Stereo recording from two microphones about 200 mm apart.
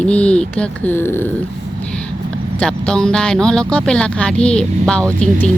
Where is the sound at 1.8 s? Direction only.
5° left (ahead or behind).